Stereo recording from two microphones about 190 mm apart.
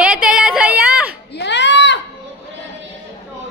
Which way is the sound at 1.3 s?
65° left (ahead or behind).